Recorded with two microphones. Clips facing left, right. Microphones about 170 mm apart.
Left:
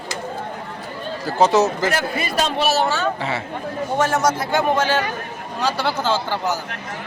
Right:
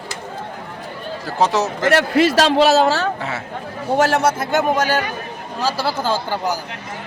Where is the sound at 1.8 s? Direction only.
75° right (ahead or behind).